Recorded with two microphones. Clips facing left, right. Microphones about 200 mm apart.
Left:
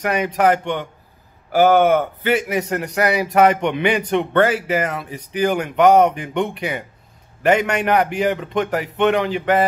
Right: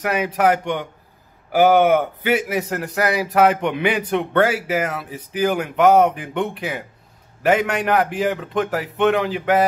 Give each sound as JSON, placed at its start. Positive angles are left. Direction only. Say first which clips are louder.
{"t": 0.0, "sound": "a man's voice", "louder": "left 1 dB", "side_deg": -5}